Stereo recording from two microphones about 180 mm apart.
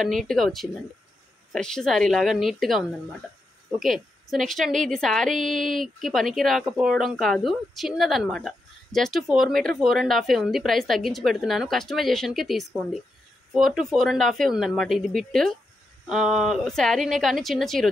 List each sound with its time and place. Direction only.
0.0 s a woman's voice: centre (ahead or behind)